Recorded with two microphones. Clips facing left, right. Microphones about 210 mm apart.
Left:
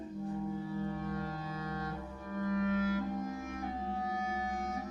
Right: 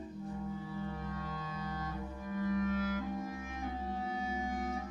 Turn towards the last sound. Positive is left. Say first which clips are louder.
# left 2 dB
turn(degrees=40)  # may be behind; listen again after turning